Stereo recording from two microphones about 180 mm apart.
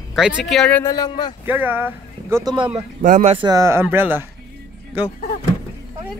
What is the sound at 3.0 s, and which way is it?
Speech, 50° right (ahead or behind).